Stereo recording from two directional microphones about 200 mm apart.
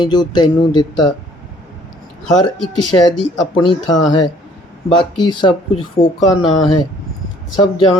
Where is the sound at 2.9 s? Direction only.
20° left (ahead or behind).